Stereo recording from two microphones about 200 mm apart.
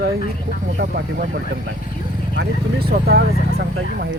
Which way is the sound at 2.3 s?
50° right (ahead or behind).